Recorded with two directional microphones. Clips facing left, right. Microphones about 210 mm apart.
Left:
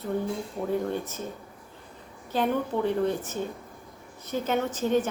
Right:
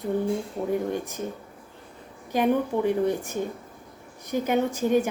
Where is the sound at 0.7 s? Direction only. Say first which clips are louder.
Right 1 dB; 15° right (ahead or behind).